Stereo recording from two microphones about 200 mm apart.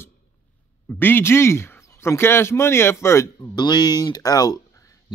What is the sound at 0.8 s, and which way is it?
A man's voice, 10° left (ahead or behind).